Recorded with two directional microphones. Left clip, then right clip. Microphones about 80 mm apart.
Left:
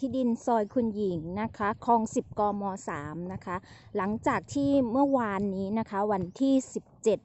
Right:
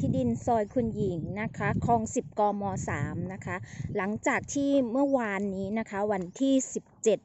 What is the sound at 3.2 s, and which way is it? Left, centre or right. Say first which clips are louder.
A woman's voice: left 1 dB; left.